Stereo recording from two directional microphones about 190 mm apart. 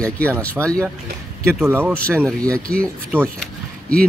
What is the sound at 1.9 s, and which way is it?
Speech, 5° left (ahead or behind).